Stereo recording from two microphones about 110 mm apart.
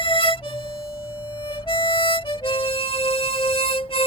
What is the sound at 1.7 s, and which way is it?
Harmonica, 50° left (ahead or behind).